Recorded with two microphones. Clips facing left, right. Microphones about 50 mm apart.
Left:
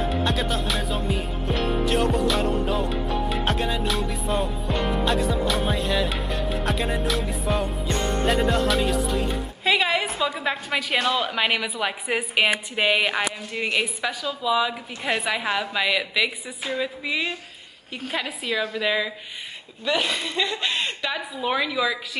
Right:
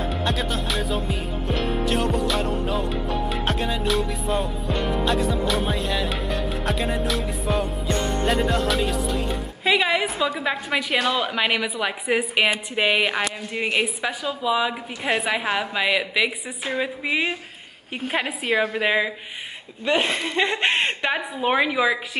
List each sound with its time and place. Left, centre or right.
0.1 s music: centre
13.6 s a woman's voice: centre